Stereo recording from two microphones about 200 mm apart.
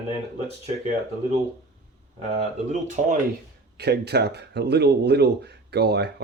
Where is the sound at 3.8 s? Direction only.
55° right (ahead or behind).